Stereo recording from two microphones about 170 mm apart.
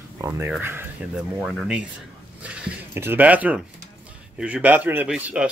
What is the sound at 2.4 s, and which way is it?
Speech, 15° right (ahead or behind).